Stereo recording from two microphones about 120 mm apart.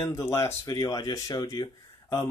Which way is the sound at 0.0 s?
20° left (ahead or behind).